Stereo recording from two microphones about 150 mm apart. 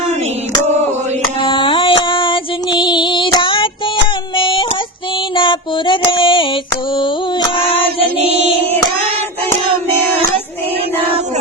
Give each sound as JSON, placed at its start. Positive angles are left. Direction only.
{"t": 1.4, "sound": "music", "side_deg": 35}
{"t": 4.4, "sound": "a sound", "side_deg": 35}
{"t": 5.3, "sound": "music", "side_deg": 35}
{"t": 9.9, "sound": "child singing", "side_deg": 15}